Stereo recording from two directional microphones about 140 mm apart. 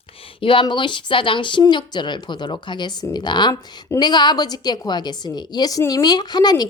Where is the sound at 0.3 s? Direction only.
35° left (ahead or behind).